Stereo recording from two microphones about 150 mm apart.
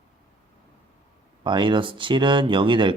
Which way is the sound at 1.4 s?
30° right (ahead or behind).